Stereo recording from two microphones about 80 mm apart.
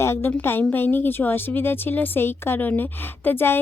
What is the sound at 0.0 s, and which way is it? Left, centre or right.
A woman's voice, left.